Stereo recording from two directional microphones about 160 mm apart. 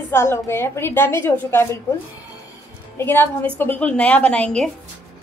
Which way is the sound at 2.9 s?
15° left (ahead or behind).